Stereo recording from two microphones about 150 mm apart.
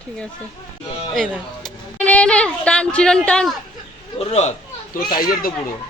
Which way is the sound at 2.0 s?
10° left (ahead or behind).